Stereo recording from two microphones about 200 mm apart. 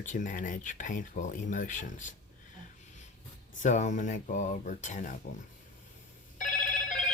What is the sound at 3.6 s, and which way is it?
Speech, 40° left (ahead or behind).